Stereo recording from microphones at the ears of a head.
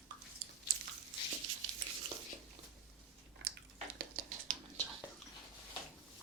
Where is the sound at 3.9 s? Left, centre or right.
Right.